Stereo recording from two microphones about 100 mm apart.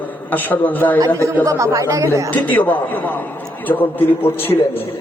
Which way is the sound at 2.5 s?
20° left (ahead or behind).